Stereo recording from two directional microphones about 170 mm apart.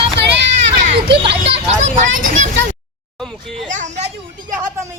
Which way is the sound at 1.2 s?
35° right (ahead or behind).